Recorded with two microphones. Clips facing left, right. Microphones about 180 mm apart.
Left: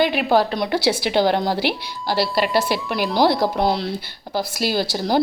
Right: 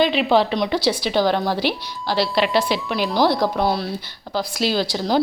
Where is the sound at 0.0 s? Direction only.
55° left (ahead or behind).